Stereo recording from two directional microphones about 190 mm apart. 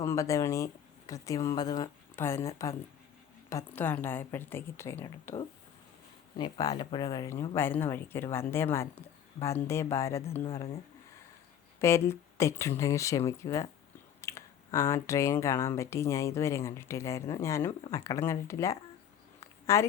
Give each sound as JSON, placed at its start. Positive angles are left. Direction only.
{"t": 0.0, "sound": "speech", "side_deg": 15}
{"t": 6.3, "sound": "speech", "side_deg": 20}
{"t": 11.8, "sound": "speech", "side_deg": 15}
{"t": 19.4, "sound": "a sound", "side_deg": 15}